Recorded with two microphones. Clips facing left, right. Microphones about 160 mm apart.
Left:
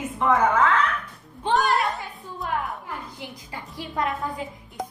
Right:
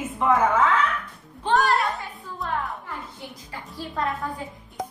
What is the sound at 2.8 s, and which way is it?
A woman's voice, 20° left (ahead or behind).